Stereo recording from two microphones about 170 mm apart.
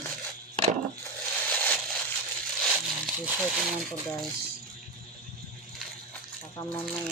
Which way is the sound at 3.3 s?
5° right (ahead or behind).